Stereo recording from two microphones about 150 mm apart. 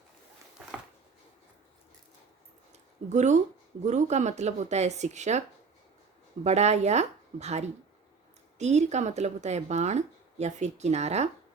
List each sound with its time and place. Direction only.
3.1 s speech: 50° right (ahead or behind)
6.4 s speech: 45° right (ahead or behind)